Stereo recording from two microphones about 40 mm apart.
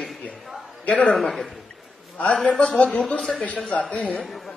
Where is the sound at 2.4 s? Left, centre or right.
Left.